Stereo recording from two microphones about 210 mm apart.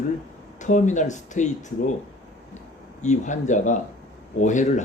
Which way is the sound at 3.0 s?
35° left (ahead or behind).